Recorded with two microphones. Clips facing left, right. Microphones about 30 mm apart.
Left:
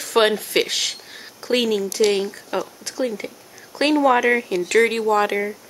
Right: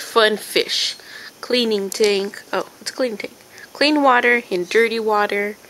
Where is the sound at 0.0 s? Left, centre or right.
Right.